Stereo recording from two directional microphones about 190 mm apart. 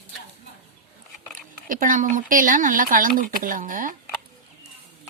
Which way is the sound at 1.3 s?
45° right (ahead or behind).